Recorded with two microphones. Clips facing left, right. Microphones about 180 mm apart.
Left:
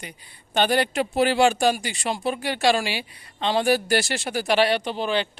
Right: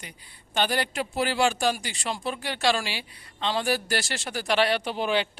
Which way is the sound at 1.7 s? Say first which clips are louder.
Left 4 dB; 15° left (ahead or behind).